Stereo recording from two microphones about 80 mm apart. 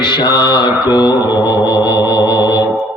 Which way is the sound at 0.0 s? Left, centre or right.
Left.